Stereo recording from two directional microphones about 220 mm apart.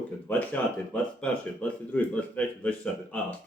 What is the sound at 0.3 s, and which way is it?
A man's voice, 5° left (ahead or behind).